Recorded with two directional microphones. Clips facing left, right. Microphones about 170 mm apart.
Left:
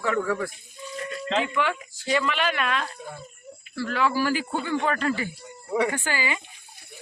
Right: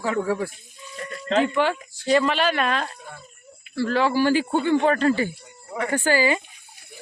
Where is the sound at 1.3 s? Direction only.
35° right (ahead or behind).